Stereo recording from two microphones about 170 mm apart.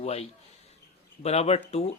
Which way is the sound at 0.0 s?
35° left (ahead or behind).